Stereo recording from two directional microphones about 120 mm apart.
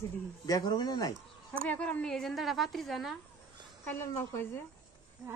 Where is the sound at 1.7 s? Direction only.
10° left (ahead or behind).